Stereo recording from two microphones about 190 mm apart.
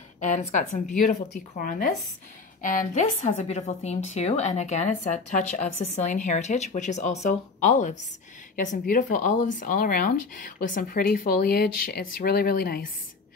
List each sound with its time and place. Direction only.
0.2 s speech: 40° left (ahead or behind)